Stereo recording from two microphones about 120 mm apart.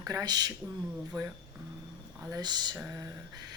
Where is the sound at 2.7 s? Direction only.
25° right (ahead or behind).